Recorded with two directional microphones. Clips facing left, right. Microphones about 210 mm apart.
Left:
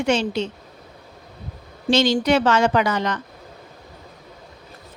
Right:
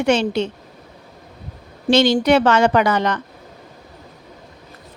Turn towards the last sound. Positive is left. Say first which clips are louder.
# right 3 dB
turn(degrees=-60)  # may be behind; listen again after turning